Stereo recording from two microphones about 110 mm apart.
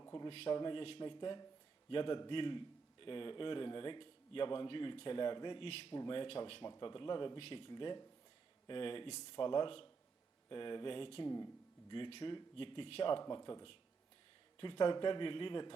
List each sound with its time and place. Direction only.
0.0 s a sound: 35° left (ahead or behind)
0.3 s a man's voice: 55° left (ahead or behind)
13.2 s a man's voice: 40° left (ahead or behind)